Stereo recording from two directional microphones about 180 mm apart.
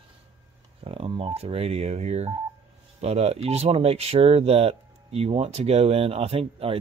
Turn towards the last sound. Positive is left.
turn(degrees=-35)  # may be behind; listen again after turning